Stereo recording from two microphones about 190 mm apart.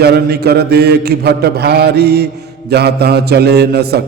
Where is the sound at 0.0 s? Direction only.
55° right (ahead or behind).